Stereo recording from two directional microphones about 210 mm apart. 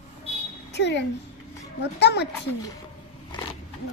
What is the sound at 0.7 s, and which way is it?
A child's voice, 55° left (ahead or behind).